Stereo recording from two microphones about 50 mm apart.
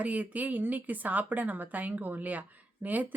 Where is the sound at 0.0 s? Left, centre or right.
Right.